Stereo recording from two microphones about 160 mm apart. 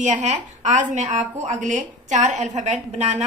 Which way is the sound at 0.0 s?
50° right (ahead or behind).